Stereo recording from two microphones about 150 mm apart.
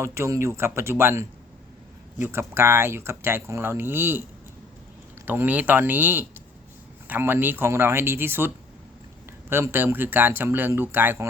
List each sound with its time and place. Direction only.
0.0 s speech: 20° right (ahead or behind)
5.2 s speech: 10° right (ahead or behind)